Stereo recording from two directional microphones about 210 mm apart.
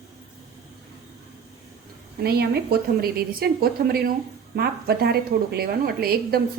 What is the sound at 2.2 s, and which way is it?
A woman's voice, 50° right (ahead or behind).